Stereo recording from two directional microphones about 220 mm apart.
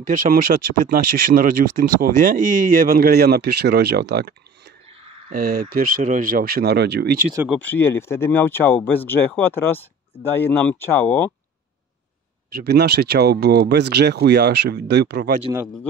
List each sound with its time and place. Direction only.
0.0 s speech: 40° right (ahead or behind)
7.4 s speech: 5° left (ahead or behind)
12.5 s speech: 50° right (ahead or behind)